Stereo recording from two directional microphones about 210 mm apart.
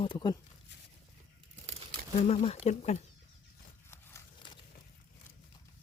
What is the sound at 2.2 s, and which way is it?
Speech, 30° left (ahead or behind).